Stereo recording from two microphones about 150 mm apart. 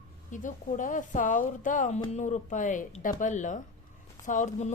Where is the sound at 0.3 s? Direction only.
55° left (ahead or behind).